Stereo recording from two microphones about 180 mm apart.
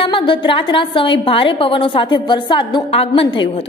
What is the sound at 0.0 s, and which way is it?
A woman's voice, 30° left (ahead or behind).